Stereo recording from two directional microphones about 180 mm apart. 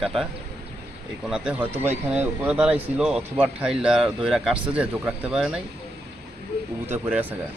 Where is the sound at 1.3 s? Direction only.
5° right (ahead or behind).